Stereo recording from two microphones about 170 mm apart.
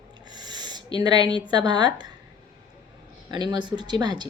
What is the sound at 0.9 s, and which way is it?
Speech, 25° right (ahead or behind).